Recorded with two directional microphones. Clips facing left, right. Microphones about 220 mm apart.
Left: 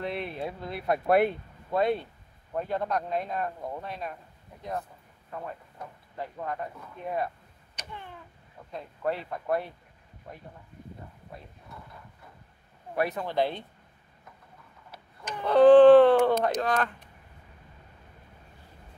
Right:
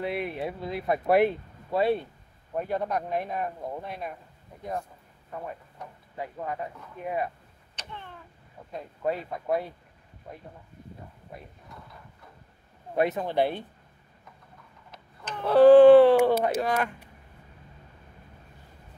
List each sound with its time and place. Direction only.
0.0 s speech: 10° right (ahead or behind)
6.1 s speech: 10° right (ahead or behind)
7.7 s cat: 10° left (ahead or behind)
8.7 s speech: 5° right (ahead or behind)
12.9 s speech: 20° right (ahead or behind)
14.9 s tick-tock: 10° left (ahead or behind)
15.4 s speech: 5° right (ahead or behind)